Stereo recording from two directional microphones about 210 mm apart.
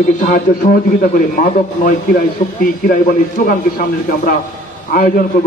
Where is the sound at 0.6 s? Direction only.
35° left (ahead or behind).